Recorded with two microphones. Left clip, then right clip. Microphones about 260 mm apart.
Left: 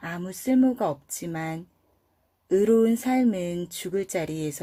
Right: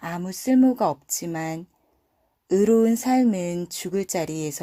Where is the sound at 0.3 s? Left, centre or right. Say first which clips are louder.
Right 3 dB; centre.